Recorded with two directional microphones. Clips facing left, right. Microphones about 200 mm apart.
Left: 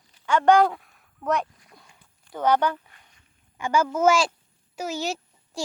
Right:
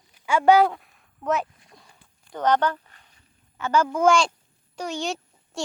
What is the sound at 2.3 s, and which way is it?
A child's voice, 10° left (ahead or behind).